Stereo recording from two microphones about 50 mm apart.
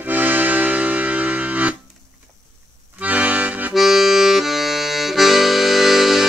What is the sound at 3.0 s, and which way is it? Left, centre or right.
Accordion, right.